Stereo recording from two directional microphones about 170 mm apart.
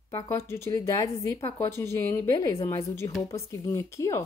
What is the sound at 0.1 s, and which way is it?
A woman's voice, 15° left (ahead or behind).